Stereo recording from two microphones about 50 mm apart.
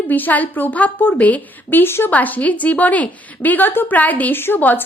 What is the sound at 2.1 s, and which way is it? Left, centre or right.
A woman's voice, left.